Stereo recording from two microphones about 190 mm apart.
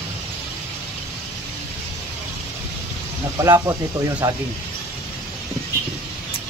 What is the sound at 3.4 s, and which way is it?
Speech, 15° right (ahead or behind).